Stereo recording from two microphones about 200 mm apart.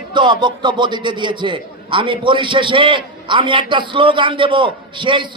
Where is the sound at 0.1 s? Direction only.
25° right (ahead or behind).